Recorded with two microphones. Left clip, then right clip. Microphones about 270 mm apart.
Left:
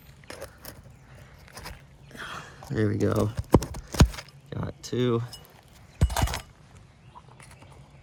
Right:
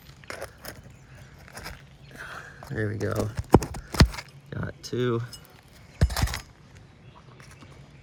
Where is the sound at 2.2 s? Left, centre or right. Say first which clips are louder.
Left 1 dB; left.